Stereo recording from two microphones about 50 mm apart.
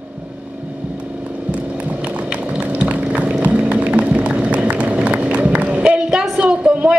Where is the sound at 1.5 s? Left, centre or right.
Right.